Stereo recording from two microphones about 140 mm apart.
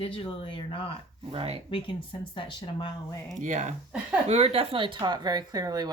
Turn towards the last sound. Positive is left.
turn(degrees=-30)  # may be behind; listen again after turning